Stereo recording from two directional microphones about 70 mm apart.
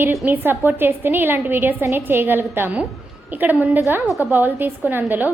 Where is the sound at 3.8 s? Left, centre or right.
Right.